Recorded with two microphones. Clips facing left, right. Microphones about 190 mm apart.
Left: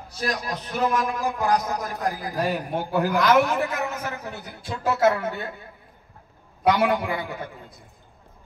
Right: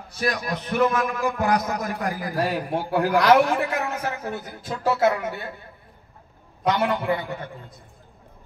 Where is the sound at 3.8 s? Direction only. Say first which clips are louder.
Right 2 dB; 65° right (ahead or behind).